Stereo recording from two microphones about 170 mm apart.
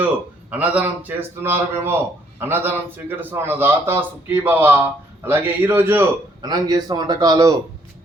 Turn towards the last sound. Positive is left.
turn(degrees=-20)  # may be behind; listen again after turning